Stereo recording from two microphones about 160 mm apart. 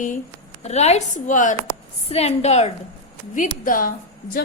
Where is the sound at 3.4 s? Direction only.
60° left (ahead or behind).